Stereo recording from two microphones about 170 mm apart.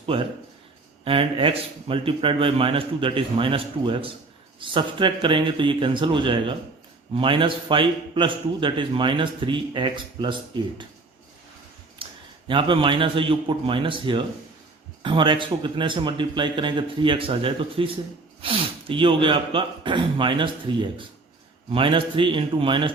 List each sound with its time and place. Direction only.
0.0 s a man's voice: 30° right (ahead or behind)
12.0 s a sound: 30° right (ahead or behind)
12.5 s a man's voice: 30° right (ahead or behind)